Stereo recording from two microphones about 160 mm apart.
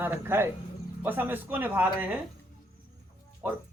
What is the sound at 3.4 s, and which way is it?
Speech, 10° right (ahead or behind).